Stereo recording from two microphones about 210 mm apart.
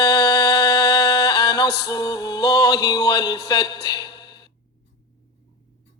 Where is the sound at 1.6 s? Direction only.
50° left (ahead or behind).